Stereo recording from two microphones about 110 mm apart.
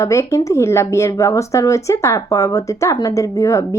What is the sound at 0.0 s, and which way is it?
Speech, 25° left (ahead or behind).